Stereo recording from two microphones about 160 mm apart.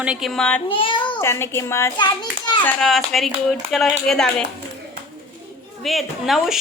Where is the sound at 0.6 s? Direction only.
35° left (ahead or behind).